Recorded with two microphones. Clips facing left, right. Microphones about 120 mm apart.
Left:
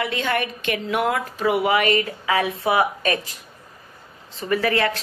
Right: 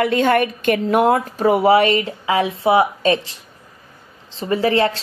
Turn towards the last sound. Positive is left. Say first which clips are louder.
# right 4 dB
turn(degrees=-30)  # may be behind; listen again after turning